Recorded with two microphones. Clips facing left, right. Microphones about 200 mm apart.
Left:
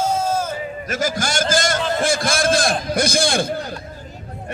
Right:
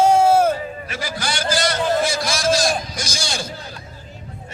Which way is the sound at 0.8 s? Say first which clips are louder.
Left 5 dB; 45° left (ahead or behind).